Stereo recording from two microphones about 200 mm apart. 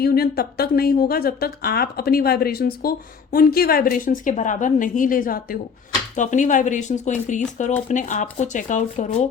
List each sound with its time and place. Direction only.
0.0 s a woman's voice: 50° left (ahead or behind)